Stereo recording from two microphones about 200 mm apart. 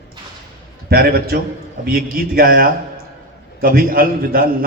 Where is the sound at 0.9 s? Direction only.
50° right (ahead or behind).